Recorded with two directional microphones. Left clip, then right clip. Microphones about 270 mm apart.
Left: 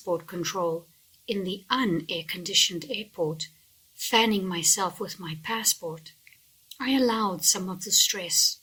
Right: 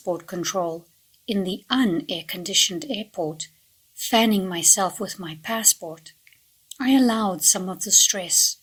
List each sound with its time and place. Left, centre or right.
0.3 s a woman's voice: centre